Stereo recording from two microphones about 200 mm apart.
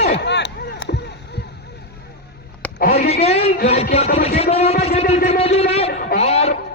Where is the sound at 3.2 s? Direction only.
30° left (ahead or behind).